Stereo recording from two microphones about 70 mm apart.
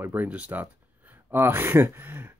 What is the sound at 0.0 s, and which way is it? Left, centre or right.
Speech, right.